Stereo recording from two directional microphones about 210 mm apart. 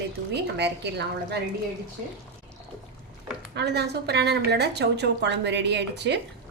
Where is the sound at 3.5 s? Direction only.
55° right (ahead or behind).